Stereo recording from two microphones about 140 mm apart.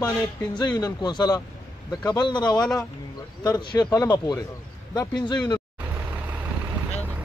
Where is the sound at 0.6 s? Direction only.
30° left (ahead or behind).